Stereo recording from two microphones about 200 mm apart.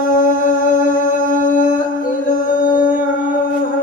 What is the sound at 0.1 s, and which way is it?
Humming, 45° left (ahead or behind).